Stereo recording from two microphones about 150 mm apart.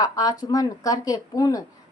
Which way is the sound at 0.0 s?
25° left (ahead or behind).